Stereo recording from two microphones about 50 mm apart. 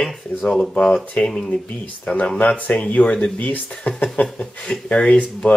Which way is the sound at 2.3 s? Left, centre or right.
Left.